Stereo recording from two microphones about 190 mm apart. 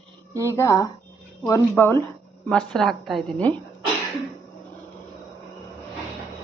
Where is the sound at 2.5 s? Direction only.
Centre (ahead or behind).